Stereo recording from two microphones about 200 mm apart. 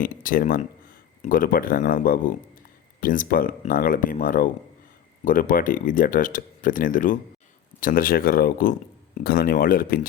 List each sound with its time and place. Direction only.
0.0 s speech: 45° left (ahead or behind)